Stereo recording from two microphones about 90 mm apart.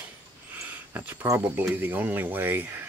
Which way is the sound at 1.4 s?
20° right (ahead or behind).